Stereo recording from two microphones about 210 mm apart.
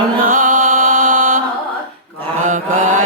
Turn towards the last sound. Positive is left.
turn(degrees=-35)  # may be behind; listen again after turning